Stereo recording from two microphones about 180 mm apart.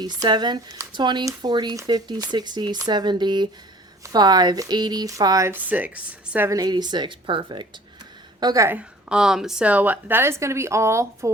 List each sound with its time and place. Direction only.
0.0 s a woman's voice: 25° right (ahead or behind)